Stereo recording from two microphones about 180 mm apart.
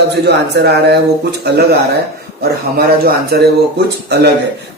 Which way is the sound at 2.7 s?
60° right (ahead or behind).